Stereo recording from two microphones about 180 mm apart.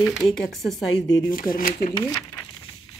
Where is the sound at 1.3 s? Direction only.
50° left (ahead or behind).